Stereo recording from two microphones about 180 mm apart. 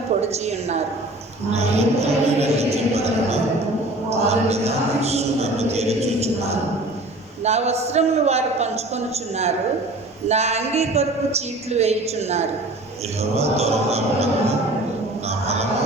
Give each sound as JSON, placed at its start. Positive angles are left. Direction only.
{"t": 0.2, "sound": "speech", "side_deg": -35}